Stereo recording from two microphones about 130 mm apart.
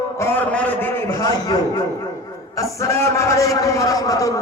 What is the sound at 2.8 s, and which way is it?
A man's voice, 20° left (ahead or behind).